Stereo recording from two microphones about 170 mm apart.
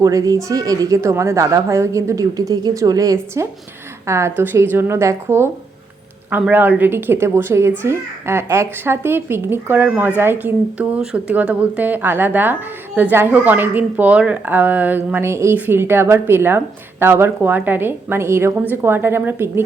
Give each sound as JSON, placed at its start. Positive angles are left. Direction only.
{"t": 0.0, "sound": "a woman's voice", "side_deg": -20}